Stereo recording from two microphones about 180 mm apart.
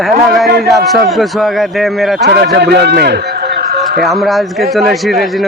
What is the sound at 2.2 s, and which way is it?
A man's voice, 65° right (ahead or behind).